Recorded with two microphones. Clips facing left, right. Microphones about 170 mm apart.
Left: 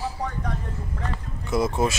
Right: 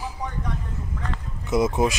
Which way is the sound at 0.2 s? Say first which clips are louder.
Left 1 dB; 65° left (ahead or behind).